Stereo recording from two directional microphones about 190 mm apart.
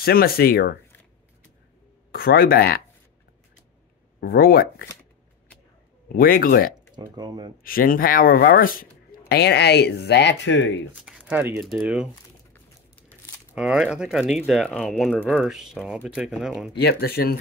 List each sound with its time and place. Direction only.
0.0 s speech: 50° left (ahead or behind)
2.1 s speech: 50° left (ahead or behind)
4.3 s speech: 50° left (ahead or behind)
6.1 s speech: 50° left (ahead or behind)
7.0 s speech: 20° right (ahead or behind)
7.6 s speech: 50° left (ahead or behind)
9.3 s speech: 60° left (ahead or behind)
10.9 s speech: 5° right (ahead or behind)
13.6 s speech: 5° right (ahead or behind)
16.7 s speech: 55° left (ahead or behind)